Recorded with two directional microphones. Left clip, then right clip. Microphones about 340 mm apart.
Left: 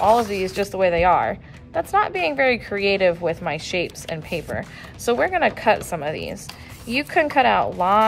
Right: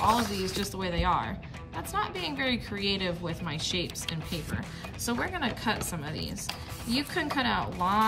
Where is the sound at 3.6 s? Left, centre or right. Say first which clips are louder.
Left 7 dB; centre.